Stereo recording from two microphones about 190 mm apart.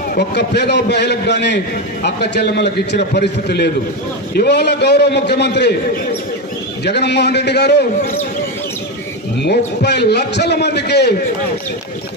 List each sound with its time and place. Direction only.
0.1 s a man's voice: 60° left (ahead or behind)
6.8 s a man's voice: 60° left (ahead or behind)
9.4 s a man's voice: 60° left (ahead or behind)